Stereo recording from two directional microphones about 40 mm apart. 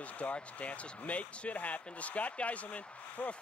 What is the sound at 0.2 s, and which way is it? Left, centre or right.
Speech, left.